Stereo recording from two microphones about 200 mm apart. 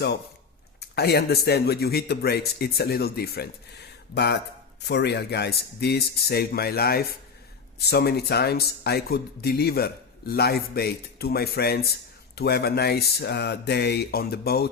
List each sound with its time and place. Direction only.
0.8 s speech: 55° left (ahead or behind)